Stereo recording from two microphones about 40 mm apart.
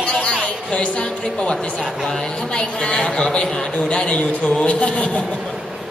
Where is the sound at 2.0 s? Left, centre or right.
Centre.